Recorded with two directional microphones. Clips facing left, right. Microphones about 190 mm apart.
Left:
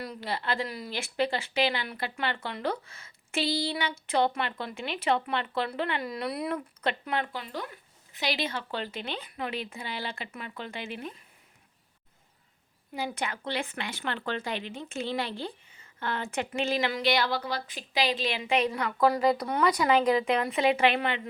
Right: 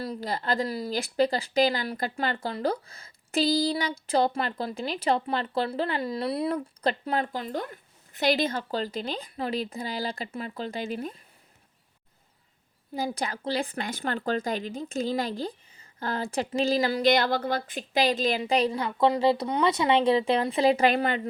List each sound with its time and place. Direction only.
0.0 s speech: 35° right (ahead or behind)
12.9 s speech: 35° right (ahead or behind)